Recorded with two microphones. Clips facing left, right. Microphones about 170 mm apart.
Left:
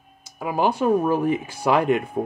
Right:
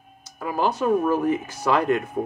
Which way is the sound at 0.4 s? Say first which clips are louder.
Left 2 dB; 15° left (ahead or behind).